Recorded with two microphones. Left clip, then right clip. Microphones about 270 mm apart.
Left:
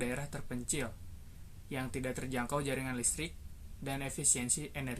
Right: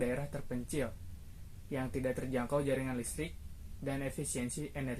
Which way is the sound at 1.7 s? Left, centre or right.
Left.